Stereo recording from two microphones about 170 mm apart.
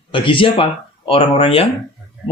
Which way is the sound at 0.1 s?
30° left (ahead or behind).